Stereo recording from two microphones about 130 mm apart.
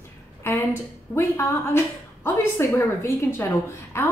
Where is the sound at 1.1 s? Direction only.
20° left (ahead or behind).